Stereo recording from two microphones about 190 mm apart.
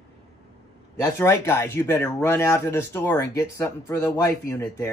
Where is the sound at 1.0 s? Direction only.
15° left (ahead or behind).